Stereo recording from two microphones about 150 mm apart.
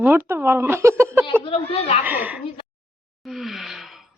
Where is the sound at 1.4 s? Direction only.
35° left (ahead or behind).